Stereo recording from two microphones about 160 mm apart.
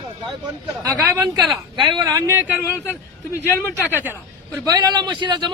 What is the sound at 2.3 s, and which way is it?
Speech, 10° right (ahead or behind).